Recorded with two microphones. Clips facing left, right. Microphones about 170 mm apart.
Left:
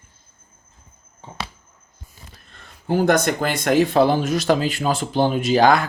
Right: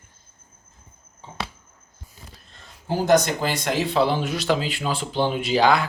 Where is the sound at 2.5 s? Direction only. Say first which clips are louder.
Left 5 dB; 55° left (ahead or behind).